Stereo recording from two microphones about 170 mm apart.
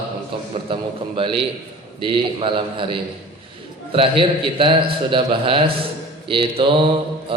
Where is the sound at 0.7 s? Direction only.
30° right (ahead or behind).